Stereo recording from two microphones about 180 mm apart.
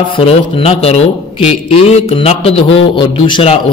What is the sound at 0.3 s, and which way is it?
A man's voice, 35° left (ahead or behind).